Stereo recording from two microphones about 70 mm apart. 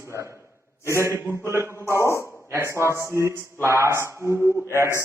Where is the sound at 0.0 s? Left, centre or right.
Right.